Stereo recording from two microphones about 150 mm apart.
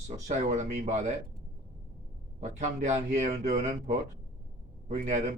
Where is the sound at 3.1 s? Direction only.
50° right (ahead or behind).